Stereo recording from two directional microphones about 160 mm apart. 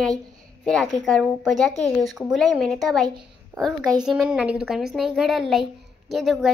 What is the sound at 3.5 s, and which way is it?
Speech, 20° right (ahead or behind).